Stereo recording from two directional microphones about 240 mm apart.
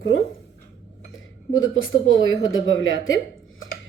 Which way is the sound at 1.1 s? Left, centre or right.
Left.